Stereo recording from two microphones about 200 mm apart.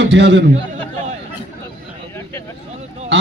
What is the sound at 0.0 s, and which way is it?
Speech, 60° right (ahead or behind).